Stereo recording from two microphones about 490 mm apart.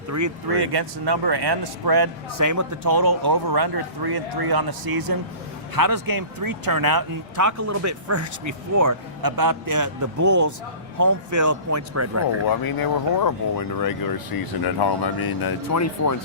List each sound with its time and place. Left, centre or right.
0.1 s speech: right
0.5 s speech: right
12.5 s speech: left